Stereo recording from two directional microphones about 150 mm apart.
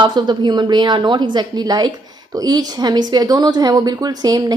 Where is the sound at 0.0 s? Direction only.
30° right (ahead or behind).